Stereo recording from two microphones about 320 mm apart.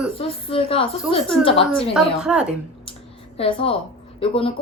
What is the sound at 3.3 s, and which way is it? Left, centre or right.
A woman's voice, centre.